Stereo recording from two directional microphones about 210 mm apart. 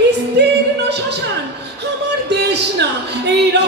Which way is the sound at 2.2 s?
55° right (ahead or behind).